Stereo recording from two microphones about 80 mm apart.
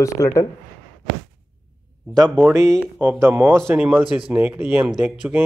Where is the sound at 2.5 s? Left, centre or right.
Right.